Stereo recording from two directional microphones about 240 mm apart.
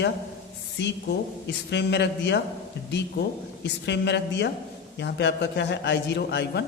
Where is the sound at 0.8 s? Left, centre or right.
Left.